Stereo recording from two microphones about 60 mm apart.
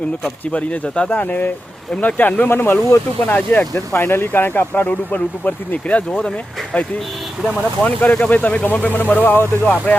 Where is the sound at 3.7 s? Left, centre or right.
Left; by 6.3 s centre.